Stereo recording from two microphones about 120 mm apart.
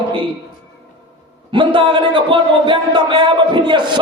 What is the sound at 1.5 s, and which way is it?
A man's voice, 40° right (ahead or behind).